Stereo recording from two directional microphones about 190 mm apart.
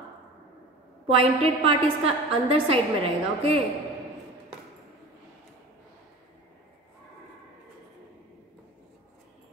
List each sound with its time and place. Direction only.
1.0 s a woman's voice: 30° right (ahead or behind)